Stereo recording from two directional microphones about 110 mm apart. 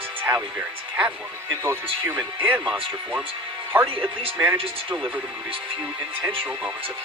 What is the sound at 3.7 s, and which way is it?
Speech, 15° right (ahead or behind).